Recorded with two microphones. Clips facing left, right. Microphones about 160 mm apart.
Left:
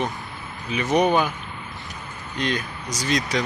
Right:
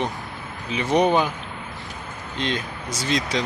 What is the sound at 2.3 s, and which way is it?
Speech, 25° right (ahead or behind).